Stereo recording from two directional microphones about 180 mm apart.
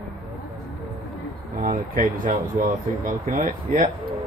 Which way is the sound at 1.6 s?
45° right (ahead or behind).